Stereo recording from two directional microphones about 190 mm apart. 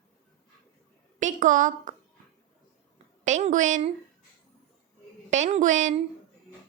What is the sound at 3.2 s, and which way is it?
Speech, 40° right (ahead or behind).